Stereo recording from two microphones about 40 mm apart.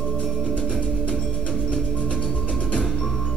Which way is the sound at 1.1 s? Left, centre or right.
Centre.